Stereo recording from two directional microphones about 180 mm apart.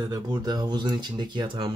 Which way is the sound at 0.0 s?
25° right (ahead or behind).